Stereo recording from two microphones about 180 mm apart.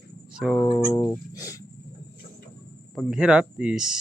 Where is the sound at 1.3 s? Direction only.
20° left (ahead or behind).